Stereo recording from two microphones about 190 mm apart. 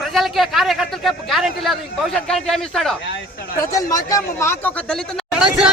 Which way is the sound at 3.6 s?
20° left (ahead or behind).